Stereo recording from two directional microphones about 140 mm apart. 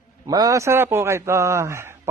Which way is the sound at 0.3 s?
25° right (ahead or behind).